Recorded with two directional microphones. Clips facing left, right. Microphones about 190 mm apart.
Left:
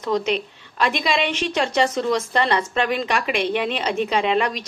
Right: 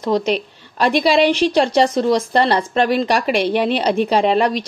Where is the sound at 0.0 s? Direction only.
35° right (ahead or behind).